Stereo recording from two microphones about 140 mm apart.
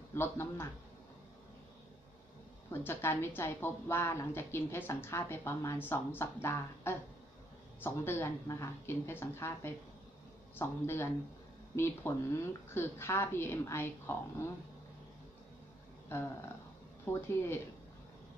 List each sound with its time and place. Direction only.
0.1 s a woman's voice: 15° left (ahead or behind)
2.7 s a woman's voice: 15° left (ahead or behind)
16.1 s a woman's voice: 15° left (ahead or behind)